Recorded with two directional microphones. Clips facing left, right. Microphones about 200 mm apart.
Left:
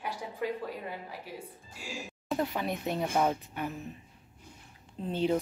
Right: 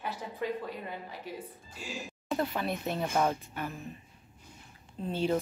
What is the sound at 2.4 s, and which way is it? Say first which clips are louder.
Speech: even; 15° left (ahead or behind).